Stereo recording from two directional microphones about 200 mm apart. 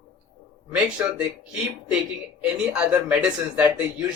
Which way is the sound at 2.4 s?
5° right (ahead or behind).